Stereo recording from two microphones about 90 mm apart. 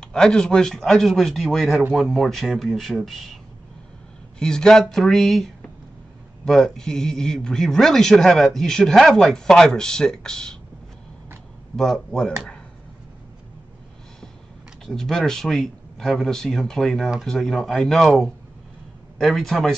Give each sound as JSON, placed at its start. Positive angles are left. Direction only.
{"t": 0.0, "sound": "speech", "side_deg": 5}
{"t": 4.4, "sound": "speech", "side_deg": 10}
{"t": 11.7, "sound": "speech", "side_deg": 5}
{"t": 14.9, "sound": "speech", "side_deg": 5}